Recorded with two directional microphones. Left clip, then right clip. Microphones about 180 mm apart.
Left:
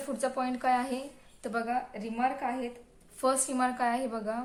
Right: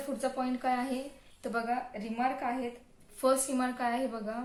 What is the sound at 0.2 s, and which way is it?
Speech, 40° left (ahead or behind).